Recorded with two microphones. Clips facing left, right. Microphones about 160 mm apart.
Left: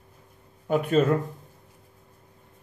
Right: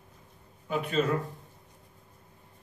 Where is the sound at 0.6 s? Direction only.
50° left (ahead or behind).